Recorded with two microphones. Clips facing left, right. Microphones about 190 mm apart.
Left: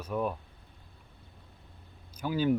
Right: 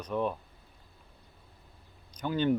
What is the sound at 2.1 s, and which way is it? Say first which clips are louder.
Speech: even; 5° left (ahead or behind).